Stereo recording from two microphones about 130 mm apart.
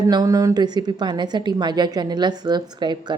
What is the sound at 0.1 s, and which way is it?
A woman's voice, 30° right (ahead or behind).